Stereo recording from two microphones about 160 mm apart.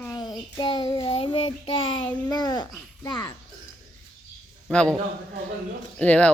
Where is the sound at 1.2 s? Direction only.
35° left (ahead or behind).